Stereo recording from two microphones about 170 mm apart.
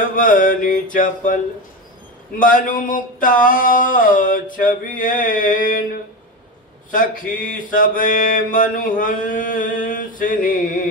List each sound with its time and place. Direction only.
0.1 s mantra: 50° left (ahead or behind)
2.4 s mantra: 50° left (ahead or behind)
7.3 s mantra: 50° left (ahead or behind)